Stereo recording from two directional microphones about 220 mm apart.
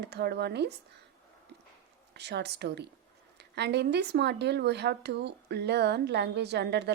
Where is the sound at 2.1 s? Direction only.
50° right (ahead or behind).